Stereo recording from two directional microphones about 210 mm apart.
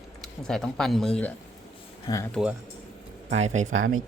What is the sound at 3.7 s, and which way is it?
Speech, 70° right (ahead or behind).